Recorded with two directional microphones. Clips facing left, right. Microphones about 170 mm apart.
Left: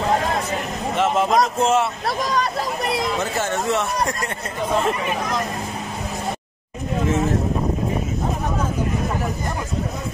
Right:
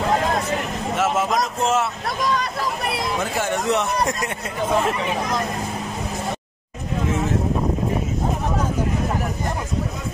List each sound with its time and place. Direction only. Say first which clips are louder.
0.9 s speech: left 3 dB; 5° right (ahead or behind)
2.0 s speech: left 1 dB; 40° left (ahead or behind)
3.2 s speech: even; 10° right (ahead or behind)